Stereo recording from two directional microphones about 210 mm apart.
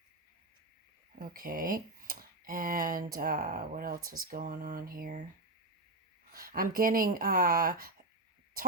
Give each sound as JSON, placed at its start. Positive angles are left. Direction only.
{"t": 1.2, "sound": "speech", "side_deg": -45}
{"t": 6.3, "sound": "speech", "side_deg": -45}